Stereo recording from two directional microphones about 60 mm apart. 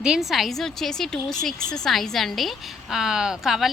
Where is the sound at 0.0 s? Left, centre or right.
Centre.